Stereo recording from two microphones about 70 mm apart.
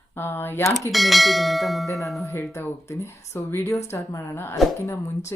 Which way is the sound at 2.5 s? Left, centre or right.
Left.